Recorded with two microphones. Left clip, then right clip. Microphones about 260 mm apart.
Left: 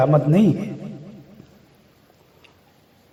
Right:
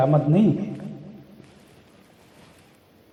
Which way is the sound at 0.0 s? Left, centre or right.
Left.